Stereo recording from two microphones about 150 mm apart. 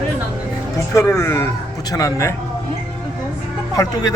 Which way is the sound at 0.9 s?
15° left (ahead or behind).